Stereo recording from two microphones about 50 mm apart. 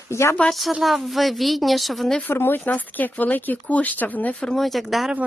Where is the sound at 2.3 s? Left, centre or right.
Left.